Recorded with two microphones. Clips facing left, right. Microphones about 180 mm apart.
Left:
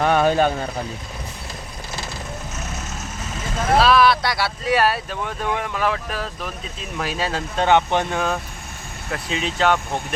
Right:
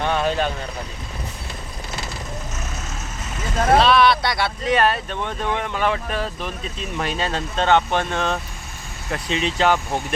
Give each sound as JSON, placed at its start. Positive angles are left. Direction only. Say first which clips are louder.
{"t": 0.0, "sound": "speech", "louder": "left 4 dB", "side_deg": 45}
{"t": 3.8, "sound": "speech", "louder": "left 2 dB", "side_deg": 0}